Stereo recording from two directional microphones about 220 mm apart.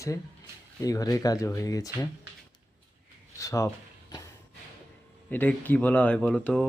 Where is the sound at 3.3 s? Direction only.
15° left (ahead or behind).